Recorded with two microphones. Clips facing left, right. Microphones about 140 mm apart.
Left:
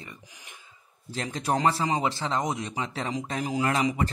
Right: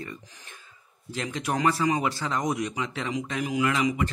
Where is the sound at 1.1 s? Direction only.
35° left (ahead or behind).